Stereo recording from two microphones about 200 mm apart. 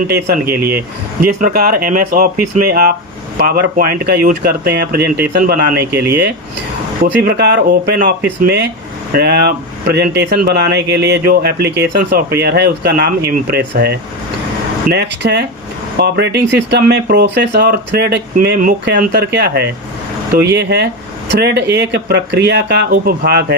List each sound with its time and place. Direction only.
0.1 s speech: 50° right (ahead or behind)
7.0 s speech: 50° right (ahead or behind)